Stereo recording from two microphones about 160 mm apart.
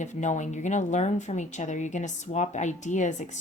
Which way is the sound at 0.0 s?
50° left (ahead or behind).